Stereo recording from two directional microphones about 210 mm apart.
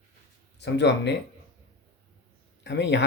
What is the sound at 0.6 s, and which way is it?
Speech, 55° left (ahead or behind).